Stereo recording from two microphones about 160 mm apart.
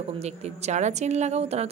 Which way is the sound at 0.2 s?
45° right (ahead or behind).